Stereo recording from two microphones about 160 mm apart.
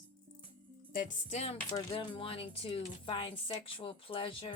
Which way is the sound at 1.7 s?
30° left (ahead or behind).